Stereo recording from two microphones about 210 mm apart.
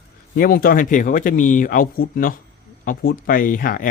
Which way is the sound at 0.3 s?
45° left (ahead or behind).